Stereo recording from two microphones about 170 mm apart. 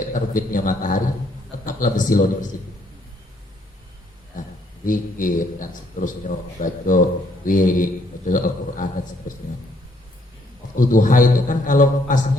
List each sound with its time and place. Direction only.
0.1 s a man's voice: 50° left (ahead or behind)
4.9 s a man's voice: 50° left (ahead or behind)
10.8 s a man's voice: 50° left (ahead or behind)